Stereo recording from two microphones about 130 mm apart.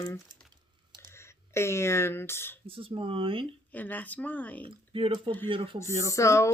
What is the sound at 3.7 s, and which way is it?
Speech, 15° left (ahead or behind).